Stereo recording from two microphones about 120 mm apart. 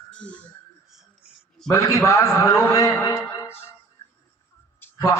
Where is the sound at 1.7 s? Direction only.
25° left (ahead or behind).